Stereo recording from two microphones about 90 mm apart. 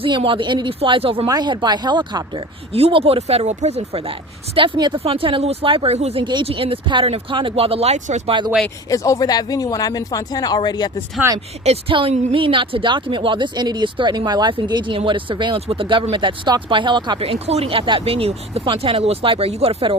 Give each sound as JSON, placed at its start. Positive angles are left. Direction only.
{"t": 0.0, "sound": "speech", "side_deg": -75}
{"t": 1.3, "sound": "a woman's voice", "side_deg": -50}
{"t": 4.8, "sound": "speech", "side_deg": -75}
{"t": 8.9, "sound": "speech", "side_deg": 40}
{"t": 11.2, "sound": "speech", "side_deg": -25}
{"t": 11.9, "sound": "a woman's voice", "side_deg": -85}
{"t": 14.7, "sound": "speech", "side_deg": -65}